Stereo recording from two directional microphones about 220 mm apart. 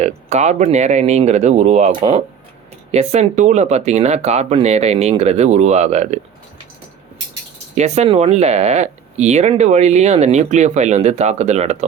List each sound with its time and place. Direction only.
0.0 s speech: 30° right (ahead or behind)
7.8 s speech: 30° right (ahead or behind)